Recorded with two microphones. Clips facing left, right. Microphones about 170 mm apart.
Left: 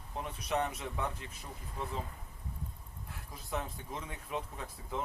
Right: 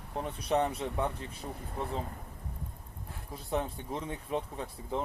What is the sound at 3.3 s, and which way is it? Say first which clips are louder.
Speech: right 6 dB; 30° right (ahead or behind).